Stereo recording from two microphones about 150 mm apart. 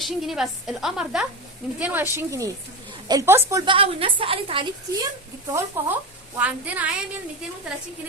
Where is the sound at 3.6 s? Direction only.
35° right (ahead or behind).